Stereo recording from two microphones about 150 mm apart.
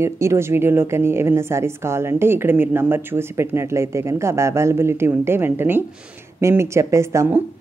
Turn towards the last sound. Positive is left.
turn(degrees=-20)  # may be behind; listen again after turning